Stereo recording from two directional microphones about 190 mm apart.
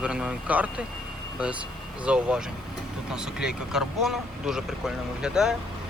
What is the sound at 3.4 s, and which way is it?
Speech, centre (ahead or behind).